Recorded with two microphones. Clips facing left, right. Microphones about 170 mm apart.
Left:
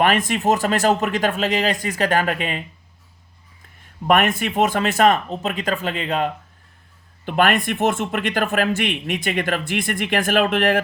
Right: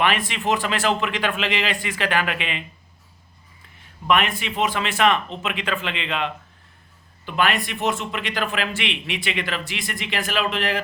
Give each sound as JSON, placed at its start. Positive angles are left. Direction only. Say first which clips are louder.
{"t": 0.0, "sound": "speech", "louder": "left 4 dB", "side_deg": 45}
{"t": 4.0, "sound": "speech", "louder": "left 4 dB", "side_deg": 45}